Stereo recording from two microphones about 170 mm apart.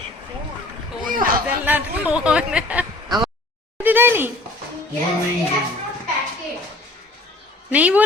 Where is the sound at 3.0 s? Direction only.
25° right (ahead or behind).